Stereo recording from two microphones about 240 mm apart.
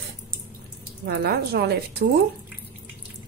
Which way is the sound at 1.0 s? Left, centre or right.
Right.